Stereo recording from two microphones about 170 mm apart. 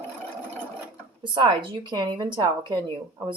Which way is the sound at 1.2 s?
30° right (ahead or behind).